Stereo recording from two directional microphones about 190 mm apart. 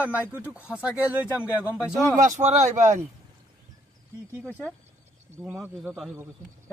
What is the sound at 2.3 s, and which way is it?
Speech, 35° right (ahead or behind).